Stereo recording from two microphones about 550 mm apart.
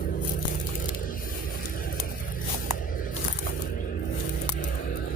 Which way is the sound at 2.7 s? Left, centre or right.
Left.